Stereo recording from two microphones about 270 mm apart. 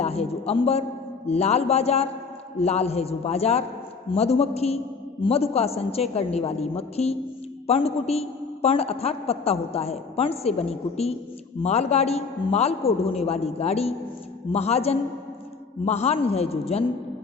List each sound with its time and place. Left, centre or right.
0.0 s a man's voice: left